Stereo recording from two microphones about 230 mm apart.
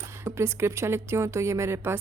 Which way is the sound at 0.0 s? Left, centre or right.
Centre.